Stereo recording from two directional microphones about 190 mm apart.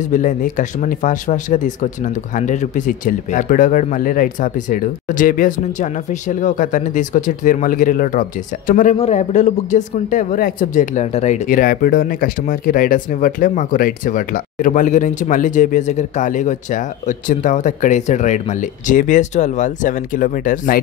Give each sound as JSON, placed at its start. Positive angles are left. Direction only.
{"t": 0.0, "sound": "speech", "side_deg": 45}